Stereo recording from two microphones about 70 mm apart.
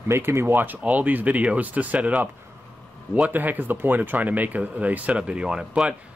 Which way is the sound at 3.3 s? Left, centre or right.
Right.